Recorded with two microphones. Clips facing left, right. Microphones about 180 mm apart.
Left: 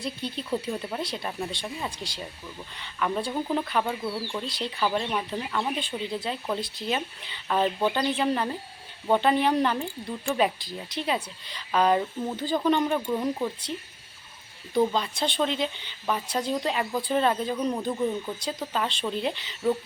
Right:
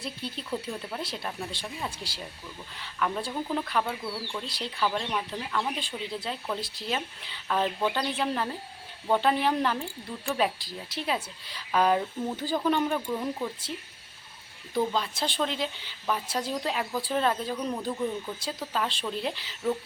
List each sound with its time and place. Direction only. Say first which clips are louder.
0.0 s speech: left 4 dB; 5° right (ahead or behind)
3.8 s speech: left 4 dB; 20° left (ahead or behind)
4.2 s speech: left 4 dB; 5° left (ahead or behind)
14.7 s speech: left 4 dB; centre (ahead or behind)